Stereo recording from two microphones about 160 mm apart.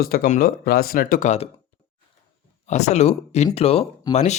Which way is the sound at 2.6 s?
45° left (ahead or behind).